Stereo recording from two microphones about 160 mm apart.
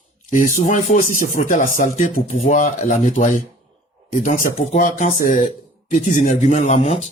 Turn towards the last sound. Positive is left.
turn(degrees=45)  # may be behind; listen again after turning